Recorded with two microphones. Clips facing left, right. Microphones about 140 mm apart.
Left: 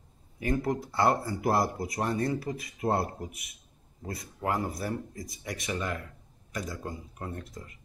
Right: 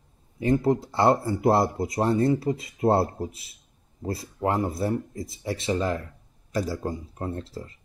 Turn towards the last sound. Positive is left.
turn(degrees=-30)  # may be behind; listen again after turning